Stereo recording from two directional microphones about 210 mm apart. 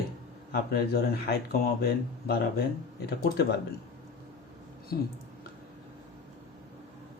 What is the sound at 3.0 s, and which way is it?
Speech, 50° left (ahead or behind).